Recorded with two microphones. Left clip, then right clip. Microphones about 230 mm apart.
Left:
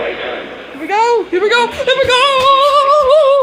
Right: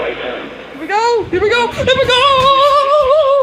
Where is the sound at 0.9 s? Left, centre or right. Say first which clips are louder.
Left 1 dB; centre.